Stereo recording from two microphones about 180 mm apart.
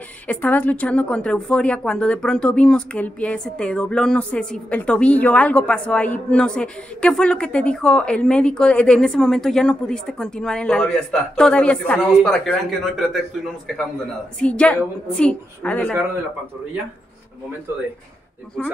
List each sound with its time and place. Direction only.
0.3 s a woman's voice: 10° left (ahead or behind)
14.4 s a woman's voice: 5° left (ahead or behind)